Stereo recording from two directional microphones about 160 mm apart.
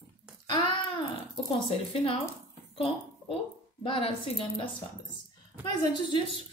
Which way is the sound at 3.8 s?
35° left (ahead or behind).